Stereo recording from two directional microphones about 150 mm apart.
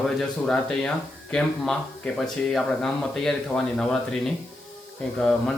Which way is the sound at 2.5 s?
5° left (ahead or behind).